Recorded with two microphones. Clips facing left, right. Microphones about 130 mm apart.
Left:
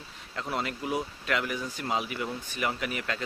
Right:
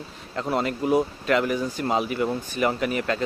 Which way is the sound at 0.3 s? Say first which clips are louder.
Right 7 dB; 45° right (ahead or behind).